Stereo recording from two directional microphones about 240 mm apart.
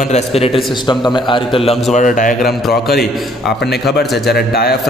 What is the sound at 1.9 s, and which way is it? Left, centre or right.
Speech, left.